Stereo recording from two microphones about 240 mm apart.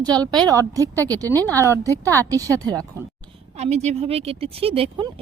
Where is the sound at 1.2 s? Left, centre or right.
Centre.